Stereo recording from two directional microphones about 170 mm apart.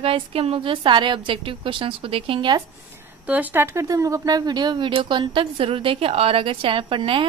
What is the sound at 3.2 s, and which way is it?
A woman's voice, 10° right (ahead or behind).